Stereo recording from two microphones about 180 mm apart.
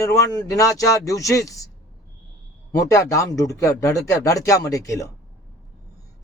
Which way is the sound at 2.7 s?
15° left (ahead or behind).